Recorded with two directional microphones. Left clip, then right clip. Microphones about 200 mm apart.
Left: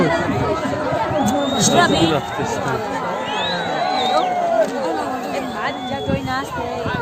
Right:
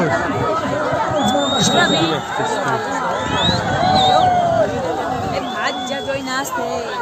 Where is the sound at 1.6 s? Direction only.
45° left (ahead or behind).